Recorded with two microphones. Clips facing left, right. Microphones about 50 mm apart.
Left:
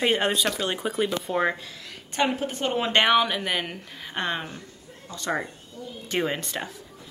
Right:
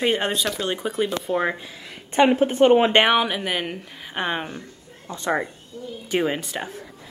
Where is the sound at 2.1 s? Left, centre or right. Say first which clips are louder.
Right 9 dB; right.